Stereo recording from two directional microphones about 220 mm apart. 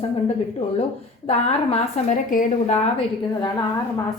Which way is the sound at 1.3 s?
30° left (ahead or behind).